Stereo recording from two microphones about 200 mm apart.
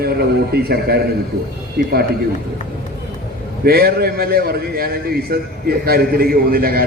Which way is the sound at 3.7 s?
50° right (ahead or behind).